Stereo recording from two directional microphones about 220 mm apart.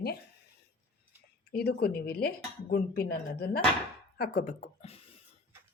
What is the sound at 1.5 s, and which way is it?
Speech, 45° left (ahead or behind).